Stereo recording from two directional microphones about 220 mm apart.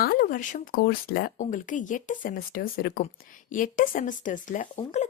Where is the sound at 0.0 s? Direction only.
40° left (ahead or behind).